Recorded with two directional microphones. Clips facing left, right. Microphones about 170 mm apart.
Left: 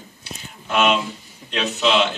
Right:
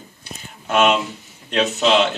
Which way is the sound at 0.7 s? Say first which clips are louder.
Right 2 dB; 45° right (ahead or behind).